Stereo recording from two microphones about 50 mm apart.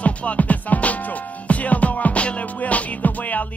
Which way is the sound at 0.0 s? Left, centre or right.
Left.